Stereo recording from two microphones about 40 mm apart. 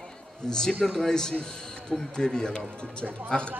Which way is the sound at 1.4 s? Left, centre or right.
Centre.